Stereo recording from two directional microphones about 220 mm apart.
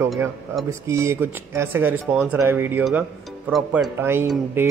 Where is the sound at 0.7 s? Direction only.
15° right (ahead or behind).